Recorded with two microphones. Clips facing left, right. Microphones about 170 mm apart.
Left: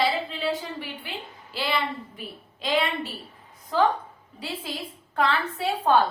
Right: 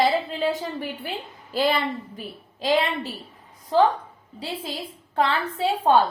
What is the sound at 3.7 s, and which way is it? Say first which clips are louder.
Speech: right 4 dB; 35° right (ahead or behind).